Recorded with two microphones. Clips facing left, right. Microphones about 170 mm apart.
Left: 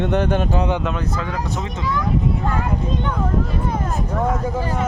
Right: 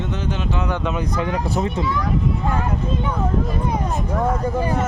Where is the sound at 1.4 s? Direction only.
35° right (ahead or behind).